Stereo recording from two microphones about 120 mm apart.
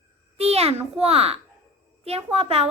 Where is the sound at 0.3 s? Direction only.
60° right (ahead or behind).